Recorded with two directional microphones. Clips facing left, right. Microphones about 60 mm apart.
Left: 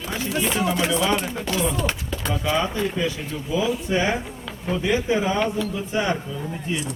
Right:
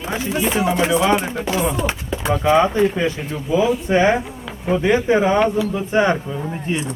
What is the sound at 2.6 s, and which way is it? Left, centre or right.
Chopping, right.